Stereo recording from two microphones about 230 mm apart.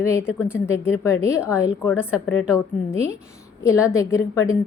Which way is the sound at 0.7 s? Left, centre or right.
Centre.